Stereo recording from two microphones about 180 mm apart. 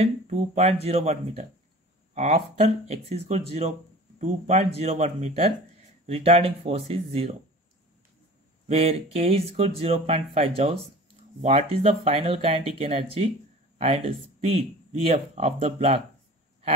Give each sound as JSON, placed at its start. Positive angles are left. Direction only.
{"t": 0.0, "sound": "speech", "side_deg": -35}
{"t": 8.6, "sound": "speech", "side_deg": -35}